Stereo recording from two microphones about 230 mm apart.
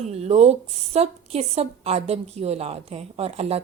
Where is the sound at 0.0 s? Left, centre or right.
Right.